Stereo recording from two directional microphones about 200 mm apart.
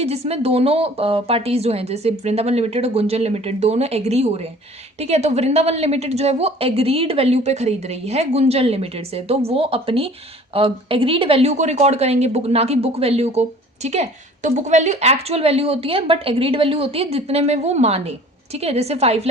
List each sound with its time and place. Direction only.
0.0 s a woman's voice: 30° right (ahead or behind)